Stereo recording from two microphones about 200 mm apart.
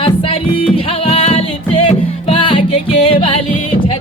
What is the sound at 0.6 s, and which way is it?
Music, 30° left (ahead or behind).